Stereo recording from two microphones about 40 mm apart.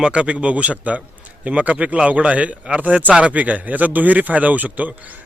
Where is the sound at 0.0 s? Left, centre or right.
Right.